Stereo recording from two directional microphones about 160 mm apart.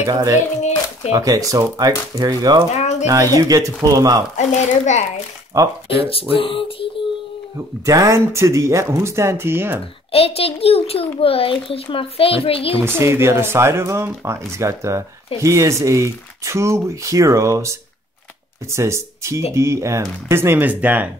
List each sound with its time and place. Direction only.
0.0 s speech: 20° right (ahead or behind)
2.7 s a woman's voice: 45° left (ahead or behind)
3.1 s speech: 20° right (ahead or behind)
4.4 s a woman's voice: 45° left (ahead or behind)
5.9 s a child's voice: 35° left (ahead or behind)
7.8 s speech: 20° right (ahead or behind)
10.1 s a child's voice: 35° left (ahead or behind)
12.8 s speech: 15° right (ahead or behind)